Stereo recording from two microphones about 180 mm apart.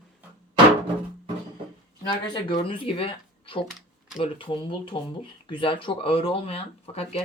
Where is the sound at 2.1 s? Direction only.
25° left (ahead or behind).